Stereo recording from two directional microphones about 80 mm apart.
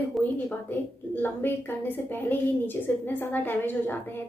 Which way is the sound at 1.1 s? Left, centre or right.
Left.